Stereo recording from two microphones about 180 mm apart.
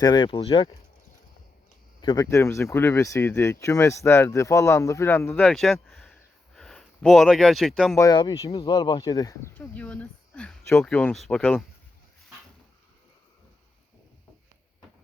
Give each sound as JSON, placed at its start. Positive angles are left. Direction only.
{"t": 0.0, "sound": "speech", "side_deg": 25}
{"t": 2.0, "sound": "speech", "side_deg": 25}
{"t": 7.9, "sound": "speech", "side_deg": 20}